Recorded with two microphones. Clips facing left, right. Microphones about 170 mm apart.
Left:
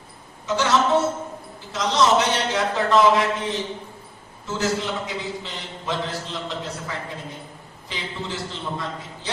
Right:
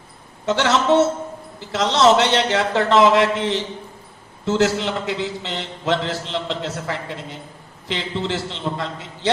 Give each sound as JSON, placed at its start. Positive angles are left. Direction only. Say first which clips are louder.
{"t": 0.4, "sound": "a man's voice", "louder": "right 3 dB", "side_deg": -75}